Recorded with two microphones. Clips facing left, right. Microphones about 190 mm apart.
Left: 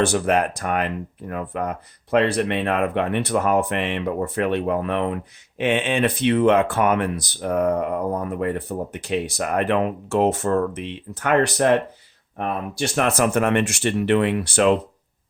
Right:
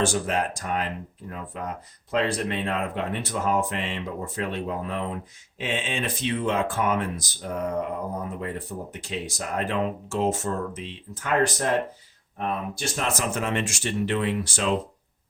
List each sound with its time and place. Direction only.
0.0 s speech: 60° left (ahead or behind)
12.8 s speech: 60° left (ahead or behind)